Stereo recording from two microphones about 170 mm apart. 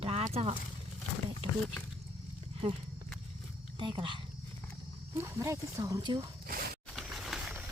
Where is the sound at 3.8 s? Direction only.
30° right (ahead or behind).